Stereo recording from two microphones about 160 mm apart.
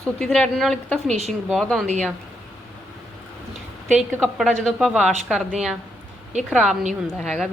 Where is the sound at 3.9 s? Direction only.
Centre (ahead or behind).